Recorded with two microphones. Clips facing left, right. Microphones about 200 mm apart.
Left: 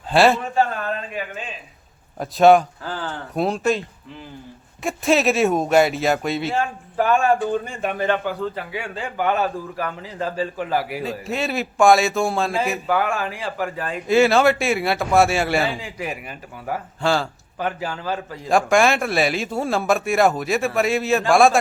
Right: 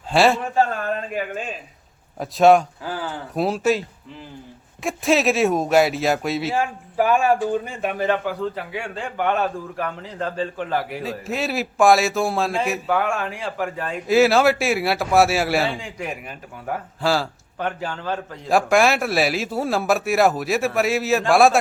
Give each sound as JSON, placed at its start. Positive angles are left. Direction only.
{"t": 0.1, "sound": "a man's voice", "side_deg": 0}
{"t": 1.1, "sound": "speech", "side_deg": -45}
{"t": 2.1, "sound": "speech", "side_deg": 0}
{"t": 2.8, "sound": "speech", "side_deg": -10}